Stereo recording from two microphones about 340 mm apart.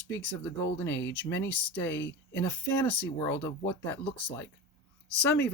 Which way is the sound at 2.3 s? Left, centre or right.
Centre.